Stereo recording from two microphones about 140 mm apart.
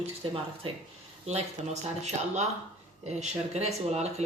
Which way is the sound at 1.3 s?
50° right (ahead or behind).